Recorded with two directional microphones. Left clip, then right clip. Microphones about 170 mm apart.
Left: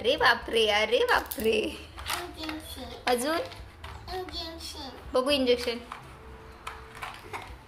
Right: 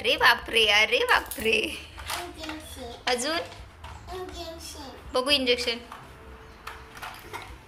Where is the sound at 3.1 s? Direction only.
45° left (ahead or behind).